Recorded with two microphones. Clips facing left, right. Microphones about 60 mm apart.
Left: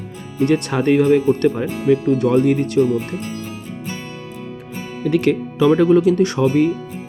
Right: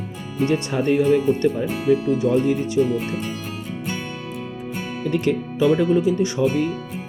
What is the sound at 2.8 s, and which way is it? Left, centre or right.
Speech, left.